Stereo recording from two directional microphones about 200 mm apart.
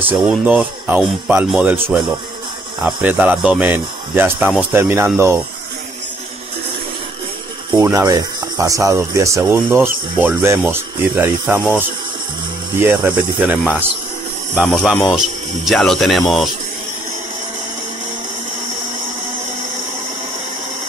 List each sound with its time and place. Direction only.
0.0 s speech: 5° right (ahead or behind)
2.8 s speech: 5° right (ahead or behind)
7.8 s speech: 15° right (ahead or behind)
12.8 s speech: 5° right (ahead or behind)